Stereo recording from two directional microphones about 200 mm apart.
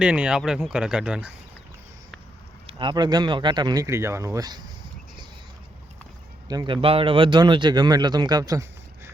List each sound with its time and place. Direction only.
0.0 s speech: 5° right (ahead or behind)
2.6 s speech: 25° right (ahead or behind)
6.5 s speech: 20° right (ahead or behind)